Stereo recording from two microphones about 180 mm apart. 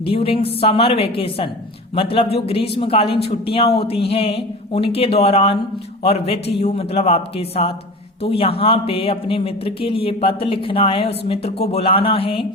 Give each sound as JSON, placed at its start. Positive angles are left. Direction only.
{"t": 0.1, "sound": "a man's voice", "side_deg": 30}